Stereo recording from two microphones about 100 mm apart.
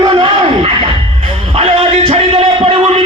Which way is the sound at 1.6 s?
75° right (ahead or behind).